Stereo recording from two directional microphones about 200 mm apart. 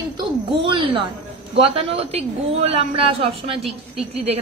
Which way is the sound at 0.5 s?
25° right (ahead or behind).